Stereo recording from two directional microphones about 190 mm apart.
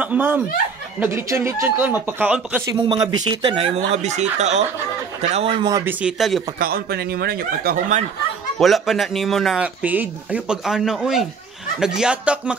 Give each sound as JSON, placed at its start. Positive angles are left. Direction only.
{"t": 0.0, "sound": "speech", "side_deg": -10}
{"t": 2.7, "sound": "a man's voice", "side_deg": -25}
{"t": 5.9, "sound": "speech", "side_deg": -5}
{"t": 6.6, "sound": "speech", "side_deg": -55}
{"t": 8.5, "sound": "speech", "side_deg": 0}